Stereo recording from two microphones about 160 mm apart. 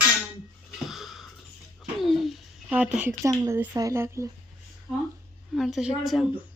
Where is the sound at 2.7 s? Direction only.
10° right (ahead or behind).